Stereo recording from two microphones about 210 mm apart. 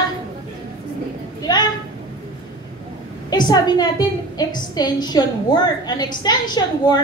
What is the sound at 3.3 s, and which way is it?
A woman's voice, 20° left (ahead or behind).